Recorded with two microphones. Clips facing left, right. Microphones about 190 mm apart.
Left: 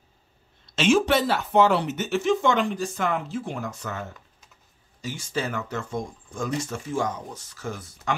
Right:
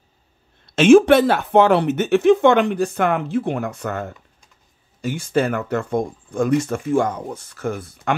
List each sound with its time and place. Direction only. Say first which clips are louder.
0.7 s speech: right 10 dB; 55° right (ahead or behind)